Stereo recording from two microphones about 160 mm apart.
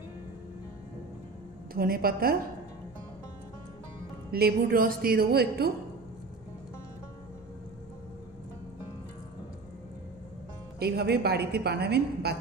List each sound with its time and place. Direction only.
1.7 s a woman's voice: 65° right (ahead or behind)
4.3 s a woman's voice: 75° right (ahead or behind)
10.8 s a woman's voice: 85° right